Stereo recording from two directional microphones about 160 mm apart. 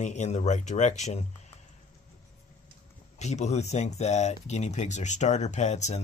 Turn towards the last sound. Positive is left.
turn(degrees=45)  # may be behind; listen again after turning